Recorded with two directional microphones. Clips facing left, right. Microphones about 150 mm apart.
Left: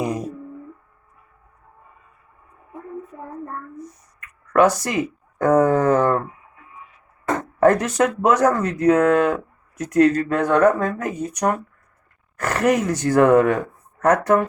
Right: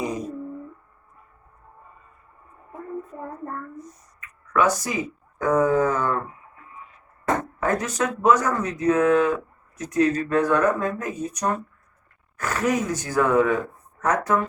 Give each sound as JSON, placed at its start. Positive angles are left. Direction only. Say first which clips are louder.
{"t": 4.2, "sound": "speech", "louder": "left 5 dB", "side_deg": 70}
{"t": 7.6, "sound": "speech", "louder": "left 12 dB", "side_deg": 70}